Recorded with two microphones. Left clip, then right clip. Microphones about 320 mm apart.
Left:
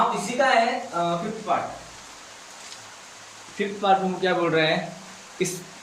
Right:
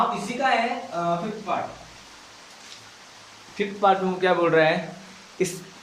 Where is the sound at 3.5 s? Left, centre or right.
Right.